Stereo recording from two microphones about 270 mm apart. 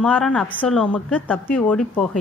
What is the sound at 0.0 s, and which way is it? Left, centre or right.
A woman's voice, centre.